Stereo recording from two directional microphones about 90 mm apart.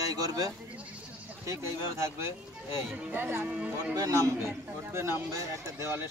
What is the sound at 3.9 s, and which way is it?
Speech, 40° right (ahead or behind).